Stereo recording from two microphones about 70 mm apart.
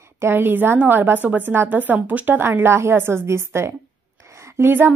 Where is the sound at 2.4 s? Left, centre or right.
Right.